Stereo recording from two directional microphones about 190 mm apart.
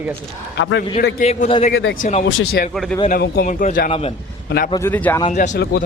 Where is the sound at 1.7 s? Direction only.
75° left (ahead or behind).